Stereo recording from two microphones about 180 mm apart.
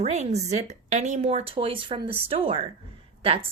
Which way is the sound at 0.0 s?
35° right (ahead or behind).